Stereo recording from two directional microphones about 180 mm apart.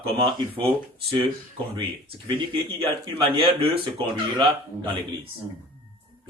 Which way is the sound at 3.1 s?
30° right (ahead or behind).